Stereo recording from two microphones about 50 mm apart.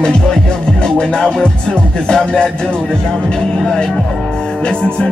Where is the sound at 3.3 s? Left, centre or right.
Centre.